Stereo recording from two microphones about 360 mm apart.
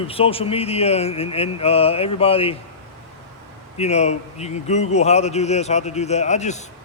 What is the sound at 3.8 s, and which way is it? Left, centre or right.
A man's voice, centre.